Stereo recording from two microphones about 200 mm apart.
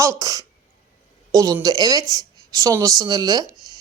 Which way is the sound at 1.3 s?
15° right (ahead or behind).